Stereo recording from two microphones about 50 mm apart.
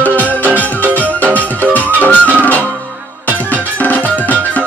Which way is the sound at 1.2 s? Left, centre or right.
Left.